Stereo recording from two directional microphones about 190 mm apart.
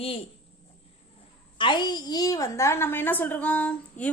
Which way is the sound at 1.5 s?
25° left (ahead or behind).